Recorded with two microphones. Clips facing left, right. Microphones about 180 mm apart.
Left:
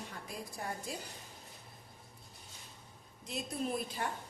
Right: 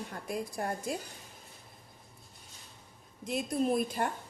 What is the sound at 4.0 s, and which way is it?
Speech, 50° right (ahead or behind).